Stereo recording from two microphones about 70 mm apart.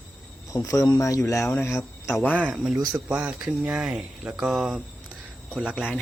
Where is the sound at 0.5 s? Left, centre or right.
Left.